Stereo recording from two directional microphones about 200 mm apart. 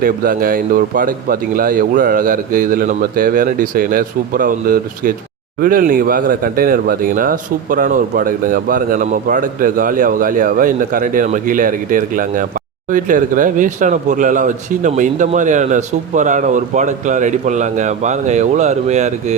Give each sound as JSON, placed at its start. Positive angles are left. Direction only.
{"t": 0.0, "sound": "speech", "side_deg": -45}